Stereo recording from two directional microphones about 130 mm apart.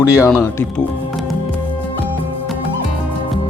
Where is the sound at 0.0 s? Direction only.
25° left (ahead or behind).